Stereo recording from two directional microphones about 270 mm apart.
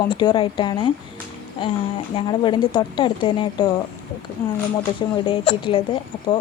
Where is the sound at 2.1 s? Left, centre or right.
Centre.